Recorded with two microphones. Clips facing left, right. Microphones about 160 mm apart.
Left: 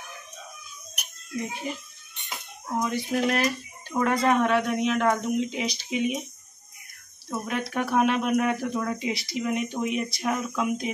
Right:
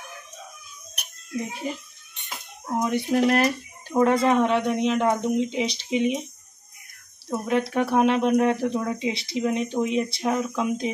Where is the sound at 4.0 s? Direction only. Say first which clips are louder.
Right 3 dB; 25° right (ahead or behind).